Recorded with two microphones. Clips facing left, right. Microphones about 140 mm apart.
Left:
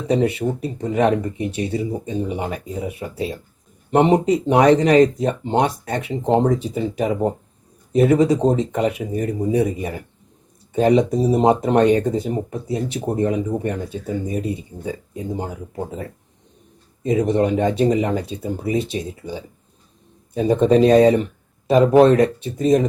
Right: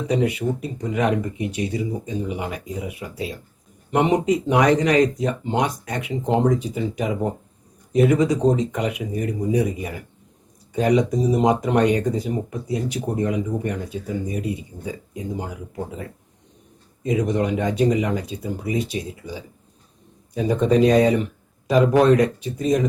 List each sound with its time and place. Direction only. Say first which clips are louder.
0.1 s speech: left 3 dB; 30° left (ahead or behind)